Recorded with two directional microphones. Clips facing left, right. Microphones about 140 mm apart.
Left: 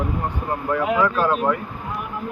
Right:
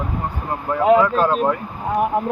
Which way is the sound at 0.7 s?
30° right (ahead or behind).